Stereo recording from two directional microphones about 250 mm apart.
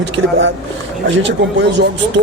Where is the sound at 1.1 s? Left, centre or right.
Right.